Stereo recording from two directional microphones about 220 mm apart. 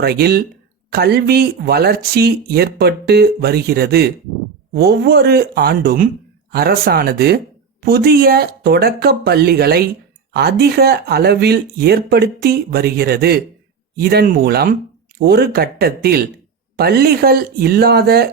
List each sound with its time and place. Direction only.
0.0 s speech: 45° right (ahead or behind)